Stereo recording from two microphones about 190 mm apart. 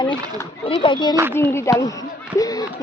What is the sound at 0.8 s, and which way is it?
Speech, 25° left (ahead or behind).